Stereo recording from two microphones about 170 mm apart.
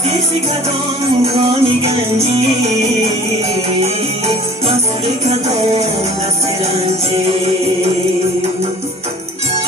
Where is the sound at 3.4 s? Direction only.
35° right (ahead or behind).